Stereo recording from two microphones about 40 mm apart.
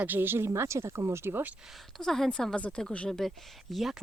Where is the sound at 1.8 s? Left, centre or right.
Centre.